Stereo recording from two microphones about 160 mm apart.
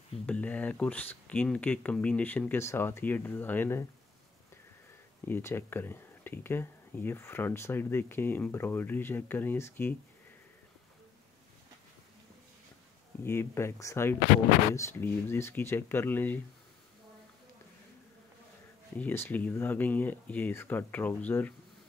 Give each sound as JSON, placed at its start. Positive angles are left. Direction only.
{"t": 0.3, "sound": "speech", "side_deg": 10}
{"t": 5.2, "sound": "speech", "side_deg": 15}
{"t": 13.2, "sound": "speech", "side_deg": 15}
{"t": 18.9, "sound": "speech", "side_deg": 10}